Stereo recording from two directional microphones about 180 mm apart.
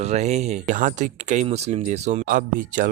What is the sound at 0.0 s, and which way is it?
Speech, 40° right (ahead or behind).